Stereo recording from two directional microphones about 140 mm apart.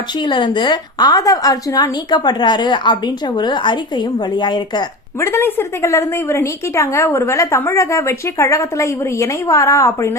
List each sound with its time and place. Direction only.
0.3 s a woman's voice: 35° left (ahead or behind)
5.2 s speech: 15° left (ahead or behind)